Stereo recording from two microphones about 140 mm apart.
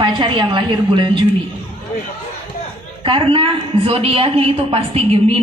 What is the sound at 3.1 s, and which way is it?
A woman's voice, 40° right (ahead or behind).